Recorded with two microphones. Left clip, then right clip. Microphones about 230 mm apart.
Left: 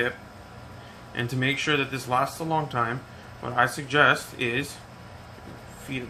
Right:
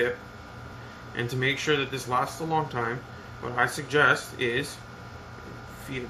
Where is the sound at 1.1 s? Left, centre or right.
Centre.